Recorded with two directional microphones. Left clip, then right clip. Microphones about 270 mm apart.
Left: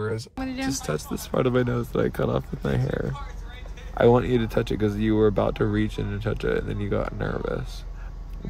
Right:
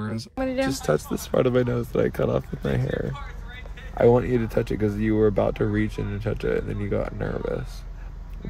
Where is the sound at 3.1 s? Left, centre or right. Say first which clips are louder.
Right 1 dB; centre.